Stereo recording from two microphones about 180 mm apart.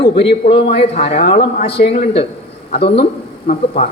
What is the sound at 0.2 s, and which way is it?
Speech, 30° left (ahead or behind).